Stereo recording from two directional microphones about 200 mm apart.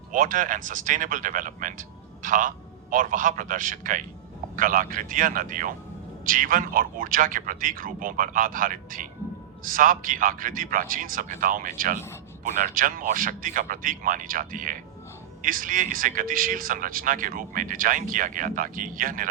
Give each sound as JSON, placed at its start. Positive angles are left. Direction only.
{"t": 0.1, "sound": "speech", "side_deg": -40}